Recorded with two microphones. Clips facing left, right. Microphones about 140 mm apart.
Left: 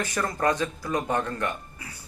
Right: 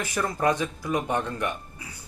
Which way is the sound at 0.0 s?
10° right (ahead or behind).